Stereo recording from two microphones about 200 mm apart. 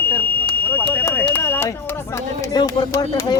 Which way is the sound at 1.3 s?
10° left (ahead or behind).